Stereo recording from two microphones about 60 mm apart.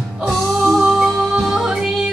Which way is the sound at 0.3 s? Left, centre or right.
Centre.